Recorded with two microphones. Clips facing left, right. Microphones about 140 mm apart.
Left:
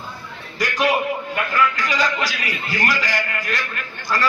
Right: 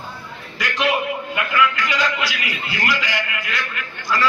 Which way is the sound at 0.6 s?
40° left (ahead or behind).